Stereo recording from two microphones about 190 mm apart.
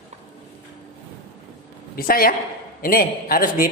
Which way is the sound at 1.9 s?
50° left (ahead or behind).